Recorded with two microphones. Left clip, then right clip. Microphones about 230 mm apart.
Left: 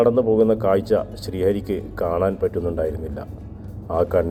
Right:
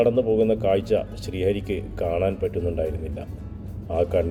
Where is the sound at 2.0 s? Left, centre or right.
Centre.